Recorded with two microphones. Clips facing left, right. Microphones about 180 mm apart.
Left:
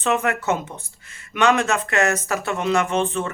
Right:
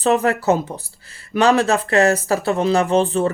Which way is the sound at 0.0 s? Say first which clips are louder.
Right 5 dB; 35° right (ahead or behind).